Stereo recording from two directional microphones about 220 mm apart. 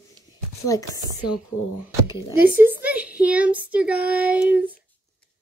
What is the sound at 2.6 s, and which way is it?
Child singing, 5° right (ahead or behind).